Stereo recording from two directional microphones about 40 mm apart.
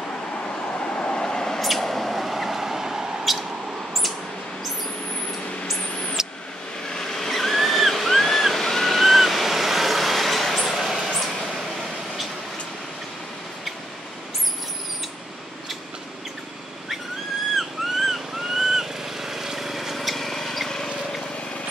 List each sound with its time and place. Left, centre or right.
0.7 s vehicle: left; by 3.1 s centre
3.3 s mouse: centre
6.2 s vehicle: centre
6.9 s a sound: centre
17.6 s owl: centre